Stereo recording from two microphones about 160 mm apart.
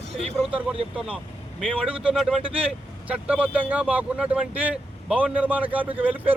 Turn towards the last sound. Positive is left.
turn(degrees=-10)  # may be behind; listen again after turning